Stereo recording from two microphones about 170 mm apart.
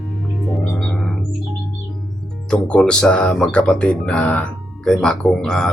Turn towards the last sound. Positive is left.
turn(degrees=5)  # may be behind; listen again after turning